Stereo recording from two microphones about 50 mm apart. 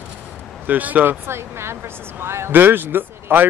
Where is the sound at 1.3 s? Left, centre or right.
Right.